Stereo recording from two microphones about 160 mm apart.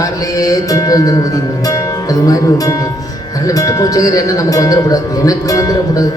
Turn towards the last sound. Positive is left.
turn(degrees=20)  # may be behind; listen again after turning